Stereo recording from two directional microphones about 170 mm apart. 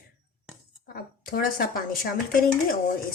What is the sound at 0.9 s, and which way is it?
A woman's voice, 60° left (ahead or behind).